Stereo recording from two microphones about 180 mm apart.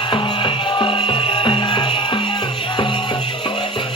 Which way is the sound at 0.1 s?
30° left (ahead or behind).